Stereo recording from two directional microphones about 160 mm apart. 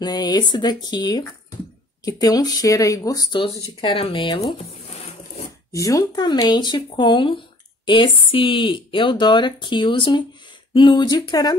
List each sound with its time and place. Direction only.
0.0 s speech: 25° left (ahead or behind)
5.7 s speech: 20° left (ahead or behind)